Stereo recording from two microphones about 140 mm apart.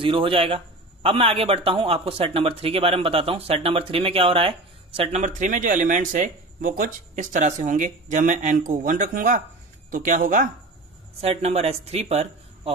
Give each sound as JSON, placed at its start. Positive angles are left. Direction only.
{"t": 0.0, "sound": "speech", "side_deg": -40}
{"t": 5.2, "sound": "speech", "side_deg": -65}
{"t": 11.1, "sound": "speech", "side_deg": -45}